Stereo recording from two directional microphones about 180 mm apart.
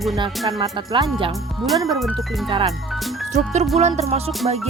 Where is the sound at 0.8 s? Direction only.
25° right (ahead or behind).